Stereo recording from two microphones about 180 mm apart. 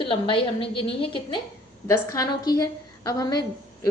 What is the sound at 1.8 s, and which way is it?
A woman's voice, 15° left (ahead or behind).